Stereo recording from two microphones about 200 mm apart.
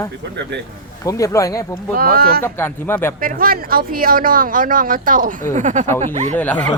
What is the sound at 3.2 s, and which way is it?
Speech, 45° right (ahead or behind).